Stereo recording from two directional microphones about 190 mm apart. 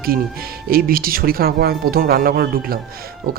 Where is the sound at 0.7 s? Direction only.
50° right (ahead or behind).